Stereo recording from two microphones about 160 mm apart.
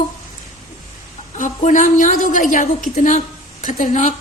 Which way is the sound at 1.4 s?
55° left (ahead or behind).